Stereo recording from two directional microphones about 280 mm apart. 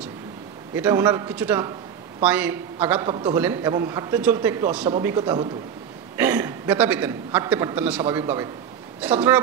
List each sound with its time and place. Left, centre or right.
0.7 s a man's voice: centre